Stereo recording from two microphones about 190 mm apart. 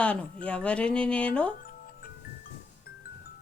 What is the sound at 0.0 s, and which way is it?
Speech, 5° left (ahead or behind).